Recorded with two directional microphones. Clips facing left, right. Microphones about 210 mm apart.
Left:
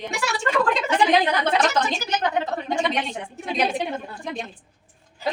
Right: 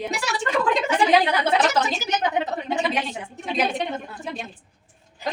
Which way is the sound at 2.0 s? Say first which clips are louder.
Even; 20° right (ahead or behind).